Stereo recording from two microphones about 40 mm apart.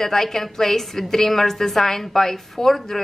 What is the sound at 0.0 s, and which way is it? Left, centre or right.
A woman's voice, centre.